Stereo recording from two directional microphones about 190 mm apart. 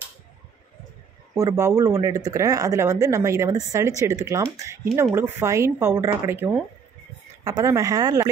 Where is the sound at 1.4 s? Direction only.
15° right (ahead or behind).